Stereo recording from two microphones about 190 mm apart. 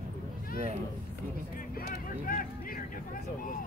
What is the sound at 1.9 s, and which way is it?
Vehicle, 45° left (ahead or behind).